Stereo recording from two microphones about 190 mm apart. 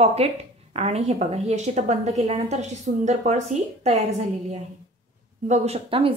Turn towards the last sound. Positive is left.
turn(degrees=-30)  # may be behind; listen again after turning